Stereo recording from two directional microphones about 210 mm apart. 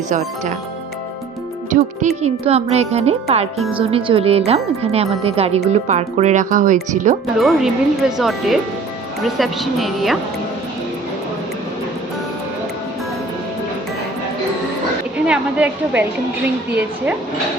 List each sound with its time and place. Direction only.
1.7 s speech: 35° right (ahead or behind)
7.3 s speech: centre (ahead or behind)
15.2 s a woman's voice: 5° right (ahead or behind)